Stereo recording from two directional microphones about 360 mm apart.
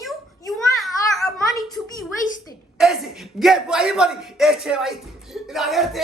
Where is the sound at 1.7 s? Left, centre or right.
Centre.